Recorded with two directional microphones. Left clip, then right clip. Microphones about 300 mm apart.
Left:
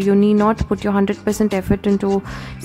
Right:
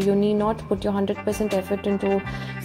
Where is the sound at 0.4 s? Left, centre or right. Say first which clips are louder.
Left 6 dB; centre.